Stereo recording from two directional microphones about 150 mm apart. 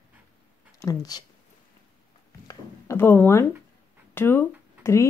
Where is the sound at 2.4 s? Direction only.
15° left (ahead or behind).